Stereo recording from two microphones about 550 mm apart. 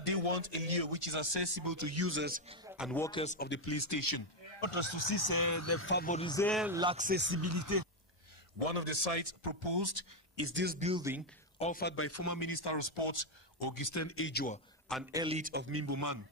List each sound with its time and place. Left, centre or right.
0.0 s speech: right; by 2.9 s centre
2.9 s speech: centre; by 4.2 s left
4.5 s speech: left; by 7.9 s right
8.5 s speech: right
10.3 s a man's voice: right; by 11.2 s centre
11.5 s speech: centre; by 13.3 s left
13.6 s speech: left; by 14.6 s centre
14.9 s a man's voice: centre; by 16.2 s right